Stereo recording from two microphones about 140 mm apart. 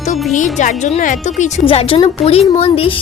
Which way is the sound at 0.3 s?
65° left (ahead or behind).